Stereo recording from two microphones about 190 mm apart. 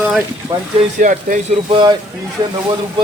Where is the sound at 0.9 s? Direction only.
45° right (ahead or behind).